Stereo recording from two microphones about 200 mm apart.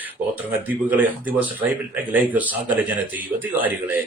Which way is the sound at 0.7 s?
10° right (ahead or behind).